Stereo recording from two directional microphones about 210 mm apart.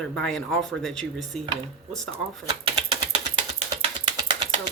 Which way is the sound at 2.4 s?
25° right (ahead or behind).